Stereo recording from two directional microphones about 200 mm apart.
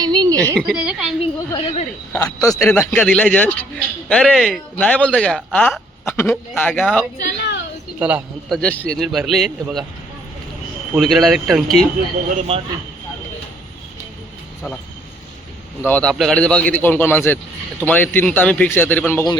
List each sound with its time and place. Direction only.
0.0 s a sound: 20° right (ahead or behind)
0.7 s a man's voice: 5° right (ahead or behind)
1.5 s a man's voice: 25° left (ahead or behind); by 7.0 s 5° left (ahead or behind)
7.3 s a sound: 60° left (ahead or behind)
7.9 s a man's voice: 5° right (ahead or behind)
10.9 s a man's voice: centre (ahead or behind)
12.3 s a man's voice: 30° right (ahead or behind)
15.8 s a man's voice: 5° left (ahead or behind)